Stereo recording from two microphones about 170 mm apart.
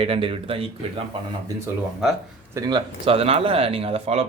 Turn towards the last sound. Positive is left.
turn(degrees=-35)  # may be behind; listen again after turning